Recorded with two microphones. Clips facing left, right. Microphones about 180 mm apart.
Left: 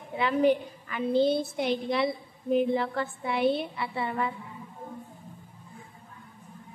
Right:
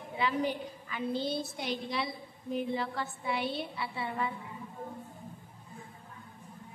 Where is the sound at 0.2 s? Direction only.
60° left (ahead or behind).